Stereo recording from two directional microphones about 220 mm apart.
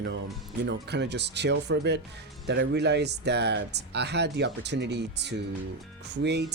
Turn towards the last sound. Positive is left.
turn(degrees=-50)  # may be behind; listen again after turning